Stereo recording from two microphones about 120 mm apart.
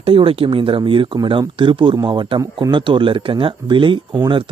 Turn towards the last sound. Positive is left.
turn(degrees=-40)  # may be behind; listen again after turning